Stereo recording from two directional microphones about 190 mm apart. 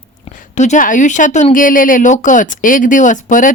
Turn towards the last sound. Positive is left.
turn(degrees=40)  # may be behind; listen again after turning